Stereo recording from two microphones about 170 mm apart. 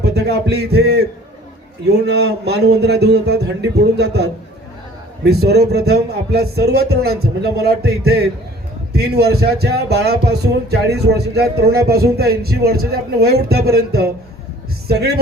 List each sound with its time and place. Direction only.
0.0 s speech: 80° right